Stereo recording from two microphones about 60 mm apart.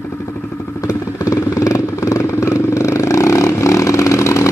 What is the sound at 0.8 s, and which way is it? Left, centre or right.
Vehicle, left.